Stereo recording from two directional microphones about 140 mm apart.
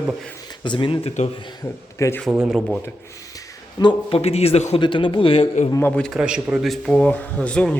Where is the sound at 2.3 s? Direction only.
5° right (ahead or behind).